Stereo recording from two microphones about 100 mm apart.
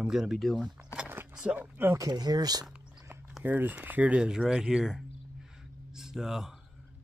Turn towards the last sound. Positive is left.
turn(degrees=-5)  # may be behind; listen again after turning